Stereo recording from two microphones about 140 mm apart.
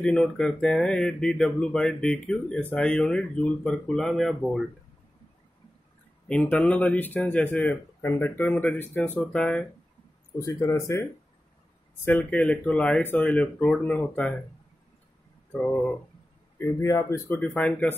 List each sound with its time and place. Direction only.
0.0 s speech: 5° left (ahead or behind)
6.2 s a man's voice: 10° left (ahead or behind)
10.4 s a man's voice: 25° left (ahead or behind)
15.5 s a man's voice: 10° left (ahead or behind)
16.5 s speech: 20° left (ahead or behind)
17.6 s a man's voice: 10° left (ahead or behind)